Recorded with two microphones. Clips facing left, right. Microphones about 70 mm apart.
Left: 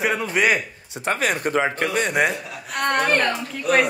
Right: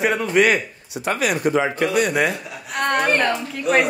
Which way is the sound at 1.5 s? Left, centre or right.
Left.